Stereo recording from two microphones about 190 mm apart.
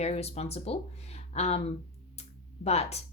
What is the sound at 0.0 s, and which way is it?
A woman's voice, 35° left (ahead or behind).